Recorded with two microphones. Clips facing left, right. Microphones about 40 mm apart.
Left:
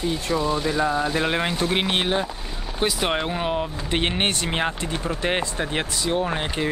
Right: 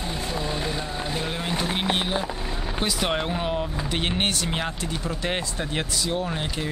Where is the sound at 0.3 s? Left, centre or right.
Centre.